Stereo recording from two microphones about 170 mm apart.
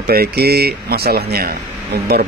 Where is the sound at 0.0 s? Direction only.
65° right (ahead or behind).